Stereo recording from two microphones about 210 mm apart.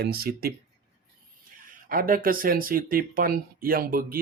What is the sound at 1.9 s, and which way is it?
Speech, 45° right (ahead or behind).